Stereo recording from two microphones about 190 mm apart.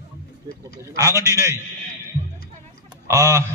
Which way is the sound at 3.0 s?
15° right (ahead or behind).